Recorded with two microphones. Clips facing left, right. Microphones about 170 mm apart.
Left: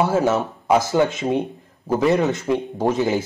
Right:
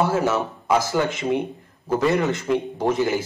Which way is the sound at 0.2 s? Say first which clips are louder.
Left 2 dB; 20° left (ahead or behind).